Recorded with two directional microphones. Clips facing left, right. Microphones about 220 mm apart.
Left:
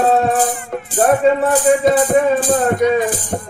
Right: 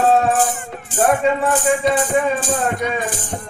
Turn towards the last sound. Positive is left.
turn(degrees=35)  # may be behind; listen again after turning